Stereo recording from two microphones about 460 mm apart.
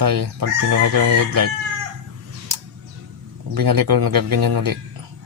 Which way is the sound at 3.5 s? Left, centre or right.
Right.